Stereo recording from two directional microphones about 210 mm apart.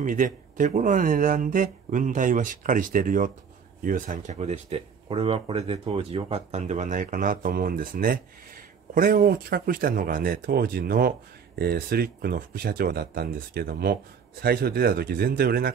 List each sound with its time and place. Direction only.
0.0 s speech: 40° right (ahead or behind)